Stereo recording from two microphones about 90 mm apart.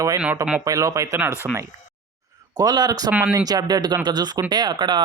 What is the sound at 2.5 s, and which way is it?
Speech, 50° right (ahead or behind).